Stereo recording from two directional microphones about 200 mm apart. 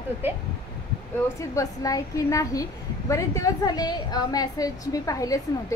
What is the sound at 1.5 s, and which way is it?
A woman's voice, 15° left (ahead or behind).